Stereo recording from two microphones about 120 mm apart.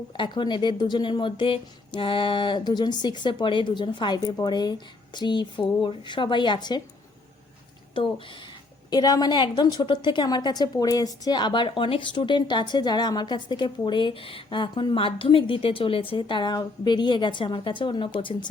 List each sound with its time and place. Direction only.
0.2 s a woman's voice: 40° left (ahead or behind)
8.9 s a woman's voice: 35° left (ahead or behind)